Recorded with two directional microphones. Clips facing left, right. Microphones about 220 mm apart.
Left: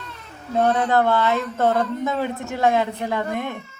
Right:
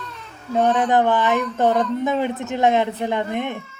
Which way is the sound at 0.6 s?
15° right (ahead or behind).